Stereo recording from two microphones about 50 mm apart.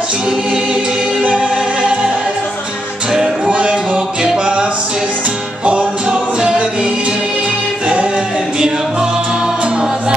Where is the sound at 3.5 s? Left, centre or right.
Right.